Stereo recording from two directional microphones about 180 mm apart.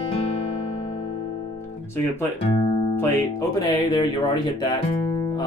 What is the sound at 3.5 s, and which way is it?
Speech, 20° left (ahead or behind).